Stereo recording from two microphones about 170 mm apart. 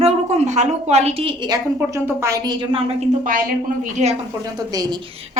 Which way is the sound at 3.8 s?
40° right (ahead or behind).